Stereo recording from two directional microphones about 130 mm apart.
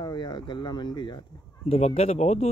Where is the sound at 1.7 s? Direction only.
50° left (ahead or behind).